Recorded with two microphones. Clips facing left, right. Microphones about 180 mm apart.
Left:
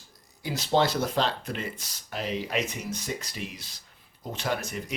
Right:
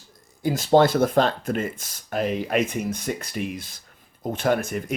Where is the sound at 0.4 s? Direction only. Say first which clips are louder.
Right 7 dB; 50° right (ahead or behind).